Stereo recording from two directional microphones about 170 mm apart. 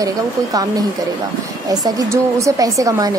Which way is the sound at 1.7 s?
20° right (ahead or behind).